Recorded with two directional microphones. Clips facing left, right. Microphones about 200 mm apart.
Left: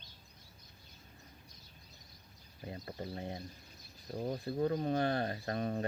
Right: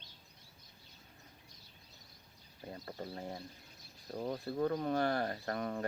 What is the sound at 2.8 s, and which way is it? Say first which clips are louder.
Speech: left 1 dB; 20° left (ahead or behind).